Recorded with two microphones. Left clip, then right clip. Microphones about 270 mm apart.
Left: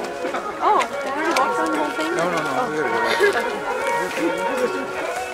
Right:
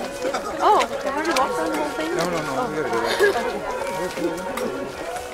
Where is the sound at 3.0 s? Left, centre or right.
Right.